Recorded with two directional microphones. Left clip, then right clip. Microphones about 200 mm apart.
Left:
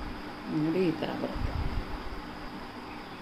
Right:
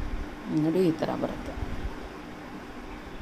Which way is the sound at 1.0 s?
35° right (ahead or behind).